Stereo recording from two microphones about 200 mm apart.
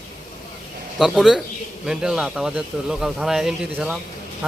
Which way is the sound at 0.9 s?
Centre (ahead or behind).